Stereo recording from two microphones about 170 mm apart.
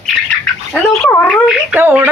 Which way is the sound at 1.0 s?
5° left (ahead or behind).